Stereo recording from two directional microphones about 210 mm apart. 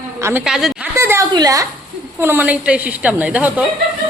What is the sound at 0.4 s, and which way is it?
Speech, centre (ahead or behind).